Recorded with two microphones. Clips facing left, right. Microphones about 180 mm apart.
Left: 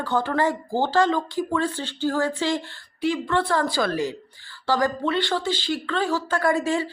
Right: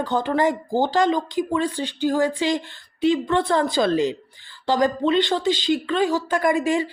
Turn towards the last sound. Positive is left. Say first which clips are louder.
# right 2 dB
turn(degrees=-15)  # may be behind; listen again after turning